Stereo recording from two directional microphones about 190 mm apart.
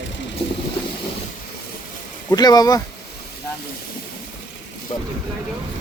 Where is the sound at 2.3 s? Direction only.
20° left (ahead or behind).